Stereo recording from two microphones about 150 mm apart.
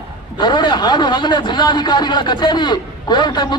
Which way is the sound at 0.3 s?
30° left (ahead or behind).